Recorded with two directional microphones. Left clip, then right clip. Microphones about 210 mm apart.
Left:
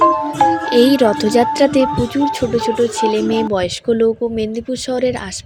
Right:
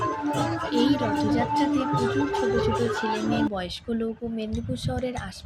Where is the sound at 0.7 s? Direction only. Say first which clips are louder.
Left 12 dB; 55° left (ahead or behind).